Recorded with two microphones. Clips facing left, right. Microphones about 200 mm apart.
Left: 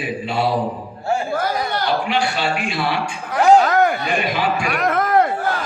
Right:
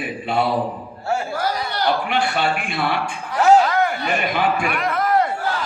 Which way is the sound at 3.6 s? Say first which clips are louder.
Left 3 dB; 45° left (ahead or behind).